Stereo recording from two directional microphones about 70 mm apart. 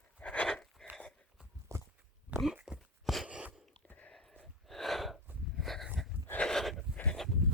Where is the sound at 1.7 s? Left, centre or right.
Right.